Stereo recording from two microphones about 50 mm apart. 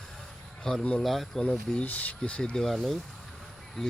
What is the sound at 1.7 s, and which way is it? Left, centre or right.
Speech, left.